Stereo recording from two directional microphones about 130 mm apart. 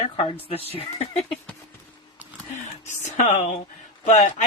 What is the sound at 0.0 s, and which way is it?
Speech, 45° left (ahead or behind).